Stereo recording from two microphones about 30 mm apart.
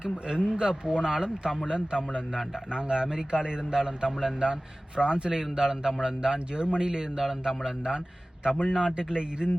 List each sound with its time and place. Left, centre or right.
0.0 s a man's voice: right
4.9 s a man's voice: right